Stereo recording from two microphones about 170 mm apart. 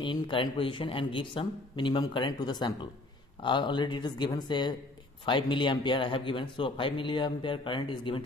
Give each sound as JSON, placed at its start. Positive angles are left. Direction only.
{"t": 0.0, "sound": "speech", "side_deg": 30}